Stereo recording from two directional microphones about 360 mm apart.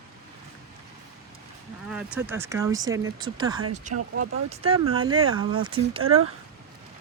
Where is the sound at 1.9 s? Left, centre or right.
Centre.